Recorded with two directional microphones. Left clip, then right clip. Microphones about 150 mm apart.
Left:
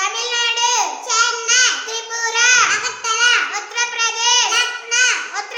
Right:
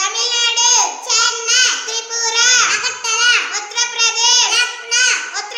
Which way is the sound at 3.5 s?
20° left (ahead or behind).